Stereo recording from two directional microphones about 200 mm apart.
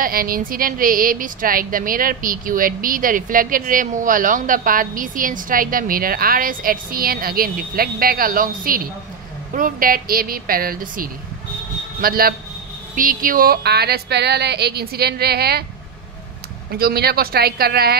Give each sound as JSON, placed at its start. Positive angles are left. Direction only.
{"t": 0.0, "sound": "a woman's voice", "side_deg": -45}
{"t": 16.7, "sound": "a woman's voice", "side_deg": -50}